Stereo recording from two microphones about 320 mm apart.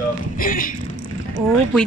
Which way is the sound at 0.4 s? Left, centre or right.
Left.